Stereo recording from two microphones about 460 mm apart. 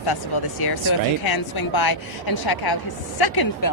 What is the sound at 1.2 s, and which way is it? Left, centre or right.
A woman's voice, left.